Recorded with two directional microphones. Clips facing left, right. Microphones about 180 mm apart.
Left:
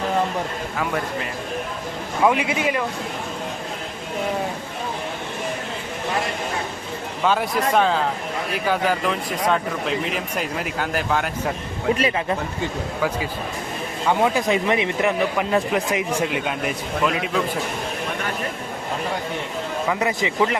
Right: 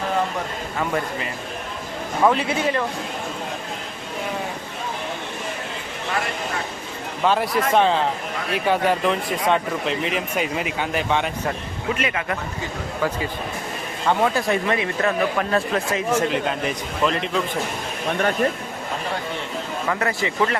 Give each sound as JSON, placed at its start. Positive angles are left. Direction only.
{"t": 2.2, "sound": "speech", "side_deg": 10}
{"t": 7.3, "sound": "speech", "side_deg": 0}
{"t": 11.9, "sound": "speech", "side_deg": 30}
{"t": 14.1, "sound": "speech", "side_deg": 15}
{"t": 16.2, "sound": "speech", "side_deg": 5}
{"t": 19.9, "sound": "speech", "side_deg": 15}